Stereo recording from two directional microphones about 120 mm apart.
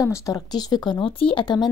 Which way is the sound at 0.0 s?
30° left (ahead or behind).